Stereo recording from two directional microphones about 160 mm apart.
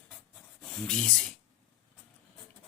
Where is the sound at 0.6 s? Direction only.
5° left (ahead or behind).